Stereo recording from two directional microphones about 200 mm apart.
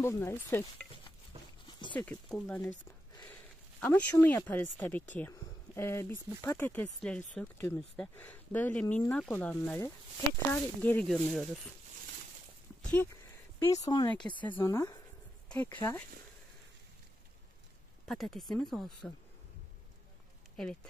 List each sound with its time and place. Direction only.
0.0 s speech: 10° left (ahead or behind)
2.0 s speech: 5° left (ahead or behind)
3.8 s speech: 10° left (ahead or behind)
12.8 s speech: 5° left (ahead or behind); by 14.3 s 20° left (ahead or behind)
14.4 s speech: 10° left (ahead or behind)
18.0 s speech: centre (ahead or behind)